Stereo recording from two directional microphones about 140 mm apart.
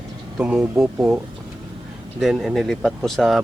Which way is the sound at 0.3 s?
10° right (ahead or behind).